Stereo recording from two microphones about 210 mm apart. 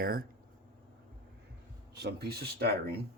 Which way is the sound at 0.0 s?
45° right (ahead or behind).